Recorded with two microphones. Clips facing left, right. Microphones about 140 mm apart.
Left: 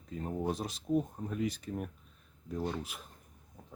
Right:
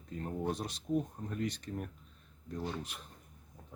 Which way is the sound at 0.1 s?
10° left (ahead or behind).